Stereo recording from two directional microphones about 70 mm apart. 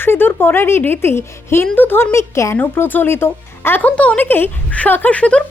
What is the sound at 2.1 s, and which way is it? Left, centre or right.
Speech, left.